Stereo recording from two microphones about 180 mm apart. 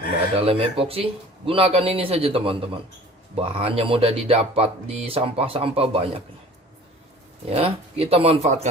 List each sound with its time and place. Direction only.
0.3 s speech: 30° right (ahead or behind)
7.5 s speech: 35° right (ahead or behind)